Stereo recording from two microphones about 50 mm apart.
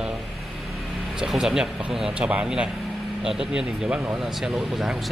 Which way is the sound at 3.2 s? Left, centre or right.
Centre.